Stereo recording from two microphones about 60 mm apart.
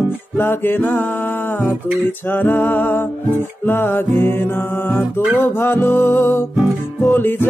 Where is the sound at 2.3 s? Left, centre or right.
Left.